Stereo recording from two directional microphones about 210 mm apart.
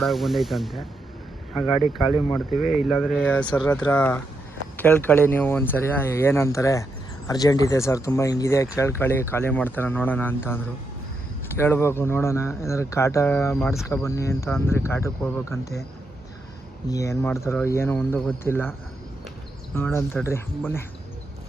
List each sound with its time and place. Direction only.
0.0 s speech: centre (ahead or behind)
1.7 s speech: 20° left (ahead or behind)
2.9 s speech: 5° left (ahead or behind)
16.9 s speech: 15° left (ahead or behind)
19.7 s speech: 10° left (ahead or behind)